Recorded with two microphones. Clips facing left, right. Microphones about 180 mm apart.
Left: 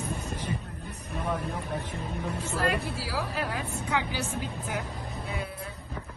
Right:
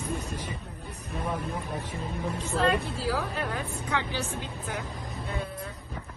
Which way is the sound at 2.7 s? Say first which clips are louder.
Right 3 dB; 10° left (ahead or behind).